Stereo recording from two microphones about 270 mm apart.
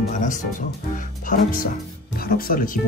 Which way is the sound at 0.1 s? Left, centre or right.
Left.